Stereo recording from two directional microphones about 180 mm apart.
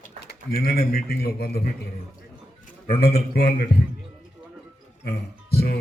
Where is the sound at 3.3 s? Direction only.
55° left (ahead or behind).